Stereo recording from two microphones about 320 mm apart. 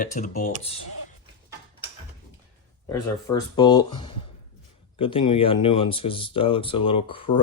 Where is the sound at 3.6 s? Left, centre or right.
Centre.